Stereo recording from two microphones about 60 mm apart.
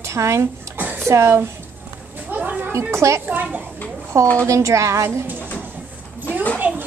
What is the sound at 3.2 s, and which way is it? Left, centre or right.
Speech, right.